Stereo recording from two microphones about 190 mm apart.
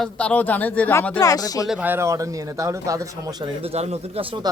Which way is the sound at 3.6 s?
35° right (ahead or behind).